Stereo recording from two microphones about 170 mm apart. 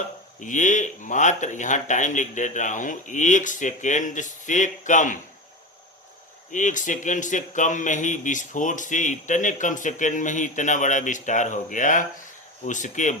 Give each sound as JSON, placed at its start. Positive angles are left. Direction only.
{"t": 0.3, "sound": "a man's voice", "side_deg": 45}
{"t": 6.5, "sound": "a man's voice", "side_deg": 50}